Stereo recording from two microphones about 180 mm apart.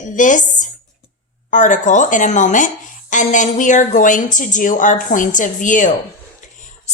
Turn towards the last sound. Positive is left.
turn(degrees=45)  # may be behind; listen again after turning